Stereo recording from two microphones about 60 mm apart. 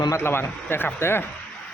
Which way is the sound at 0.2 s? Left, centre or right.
Left.